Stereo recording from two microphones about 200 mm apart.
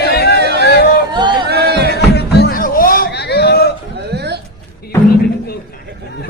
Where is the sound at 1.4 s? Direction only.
55° right (ahead or behind).